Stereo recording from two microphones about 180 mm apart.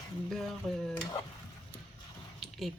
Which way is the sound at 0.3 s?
Centre (ahead or behind).